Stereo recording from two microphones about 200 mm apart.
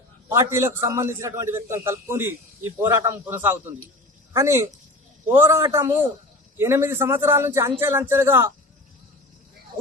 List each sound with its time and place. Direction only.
0.3 s a man's voice: 15° right (ahead or behind)